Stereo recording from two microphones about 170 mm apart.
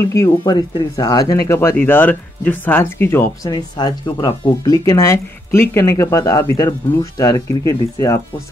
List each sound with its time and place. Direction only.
0.4 s speech: 25° left (ahead or behind)
3.5 s speech: 25° left (ahead or behind)